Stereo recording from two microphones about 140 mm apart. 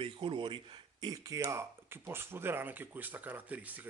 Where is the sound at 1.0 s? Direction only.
25° right (ahead or behind).